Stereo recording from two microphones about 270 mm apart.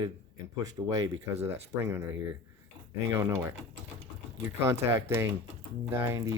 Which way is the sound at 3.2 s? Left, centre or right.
Centre.